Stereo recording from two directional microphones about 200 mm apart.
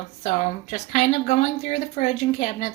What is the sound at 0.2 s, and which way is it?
Speech, 35° left (ahead or behind).